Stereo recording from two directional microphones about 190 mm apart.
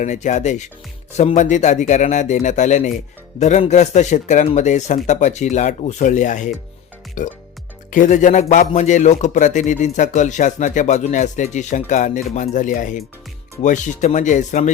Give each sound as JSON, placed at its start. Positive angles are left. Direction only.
{"t": 0.0, "sound": "speech", "side_deg": 40}